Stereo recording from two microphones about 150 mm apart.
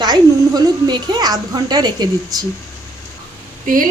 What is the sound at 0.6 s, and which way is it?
A woman's voice, 25° right (ahead or behind).